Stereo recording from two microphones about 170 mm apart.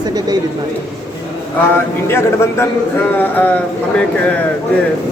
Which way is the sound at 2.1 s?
15° left (ahead or behind).